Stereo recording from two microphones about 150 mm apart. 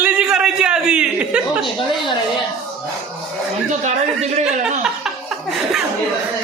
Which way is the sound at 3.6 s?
50° right (ahead or behind).